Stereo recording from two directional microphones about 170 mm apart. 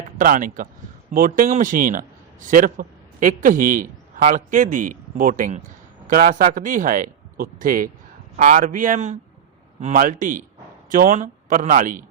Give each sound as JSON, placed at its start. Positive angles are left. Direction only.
{"t": 0.2, "sound": "a man's voice", "side_deg": -55}